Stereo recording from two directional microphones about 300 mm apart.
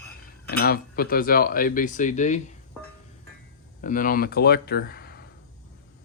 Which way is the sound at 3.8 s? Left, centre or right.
Left.